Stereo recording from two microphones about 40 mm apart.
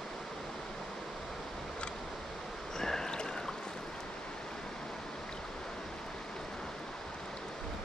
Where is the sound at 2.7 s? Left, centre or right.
Centre.